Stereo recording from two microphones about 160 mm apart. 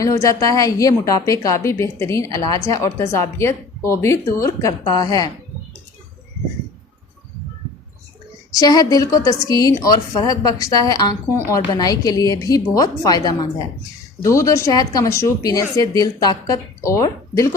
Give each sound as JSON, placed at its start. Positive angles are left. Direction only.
{"t": 0.0, "sound": "a woman's voice", "side_deg": 20}
{"t": 8.5, "sound": "a woman's voice", "side_deg": 25}